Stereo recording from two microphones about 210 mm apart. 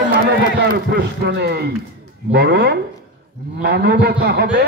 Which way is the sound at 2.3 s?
50° right (ahead or behind).